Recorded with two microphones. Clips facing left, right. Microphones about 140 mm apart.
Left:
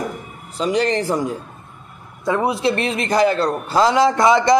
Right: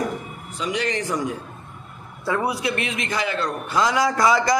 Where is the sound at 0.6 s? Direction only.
35° left (ahead or behind).